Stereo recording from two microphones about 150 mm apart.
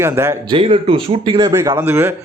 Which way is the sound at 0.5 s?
35° right (ahead or behind).